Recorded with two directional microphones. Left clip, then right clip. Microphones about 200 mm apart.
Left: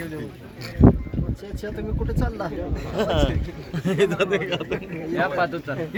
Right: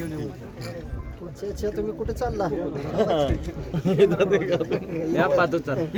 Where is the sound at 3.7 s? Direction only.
40° left (ahead or behind).